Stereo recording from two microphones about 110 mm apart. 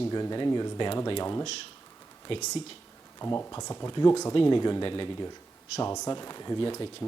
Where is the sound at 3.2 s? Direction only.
25° left (ahead or behind).